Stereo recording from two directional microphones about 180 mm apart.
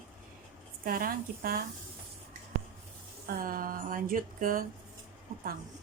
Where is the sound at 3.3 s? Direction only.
50° right (ahead or behind).